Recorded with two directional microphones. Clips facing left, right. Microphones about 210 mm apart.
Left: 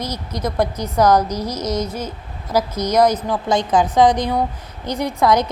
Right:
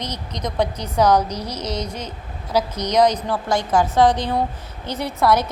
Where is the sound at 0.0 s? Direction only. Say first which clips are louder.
Left 4 dB; 10° left (ahead or behind).